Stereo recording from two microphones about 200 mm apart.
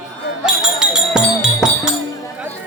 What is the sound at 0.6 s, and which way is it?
Music, 5° right (ahead or behind).